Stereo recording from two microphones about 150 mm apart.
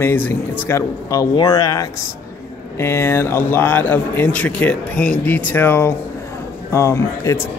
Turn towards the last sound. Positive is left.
turn(degrees=20)  # may be behind; listen again after turning